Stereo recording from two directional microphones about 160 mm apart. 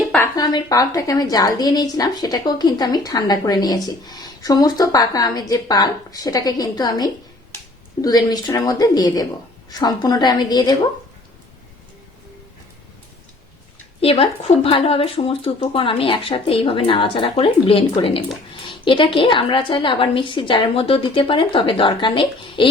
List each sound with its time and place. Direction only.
0.3 s a woman's voice: 25° left (ahead or behind)
14.0 s speech: 35° left (ahead or behind)